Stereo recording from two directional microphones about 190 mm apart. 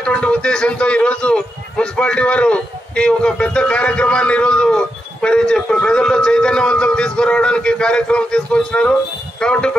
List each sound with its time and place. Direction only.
0.0 s a man's voice: 5° left (ahead or behind)